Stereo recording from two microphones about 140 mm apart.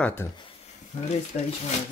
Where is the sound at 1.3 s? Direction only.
90° left.